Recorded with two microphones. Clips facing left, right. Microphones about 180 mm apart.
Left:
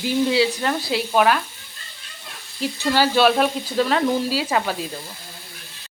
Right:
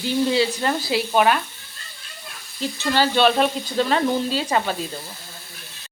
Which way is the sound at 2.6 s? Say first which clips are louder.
Left 1 dB; 10° left (ahead or behind).